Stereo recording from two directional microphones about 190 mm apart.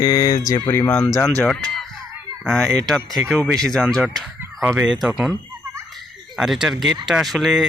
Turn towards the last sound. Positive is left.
turn(degrees=0)  # may be behind; listen again after turning